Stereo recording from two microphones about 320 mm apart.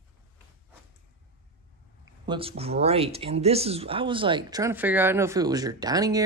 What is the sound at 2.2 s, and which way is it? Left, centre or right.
Speech, centre.